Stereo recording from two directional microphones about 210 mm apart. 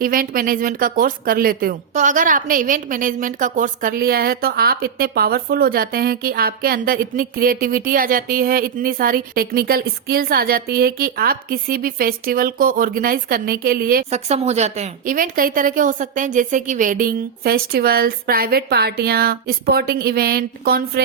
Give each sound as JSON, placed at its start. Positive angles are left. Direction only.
{"t": 0.0, "sound": "speech", "side_deg": -45}
{"t": 14.1, "sound": "speech", "side_deg": -30}